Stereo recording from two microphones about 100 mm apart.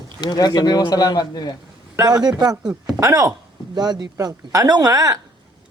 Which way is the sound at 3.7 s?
45° right (ahead or behind).